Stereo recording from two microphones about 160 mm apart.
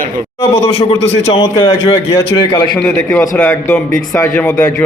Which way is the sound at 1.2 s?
40° left (ahead or behind).